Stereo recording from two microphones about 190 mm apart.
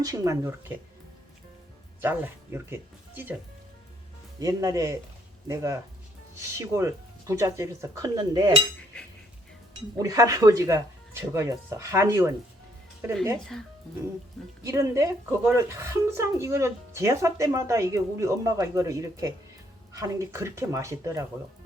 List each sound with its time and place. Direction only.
0.0 s speech: 15° right (ahead or behind)
2.0 s speech: 10° right (ahead or behind)
4.4 s speech: 20° right (ahead or behind)
10.0 s speech: 15° right (ahead or behind)
13.4 s speech: 5° left (ahead or behind)
14.6 s speech: 15° right (ahead or behind)